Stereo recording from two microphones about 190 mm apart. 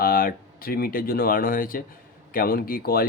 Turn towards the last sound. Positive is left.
turn(degrees=50)  # may be behind; listen again after turning